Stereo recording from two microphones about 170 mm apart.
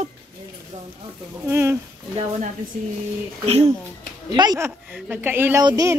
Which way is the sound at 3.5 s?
35° right (ahead or behind).